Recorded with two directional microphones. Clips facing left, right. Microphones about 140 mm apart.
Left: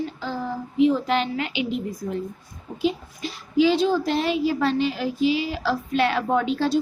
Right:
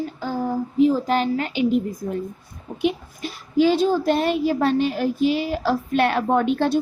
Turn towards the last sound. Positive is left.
turn(degrees=-55)  # may be behind; listen again after turning